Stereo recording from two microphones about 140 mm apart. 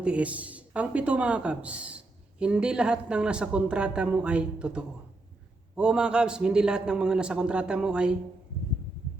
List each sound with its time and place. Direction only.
0.0 s speech: 10° right (ahead or behind)